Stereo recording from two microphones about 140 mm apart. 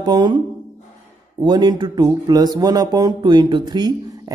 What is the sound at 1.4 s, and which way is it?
Speech, 30° right (ahead or behind).